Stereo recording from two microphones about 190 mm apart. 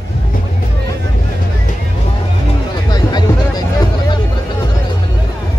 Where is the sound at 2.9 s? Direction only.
20° left (ahead or behind).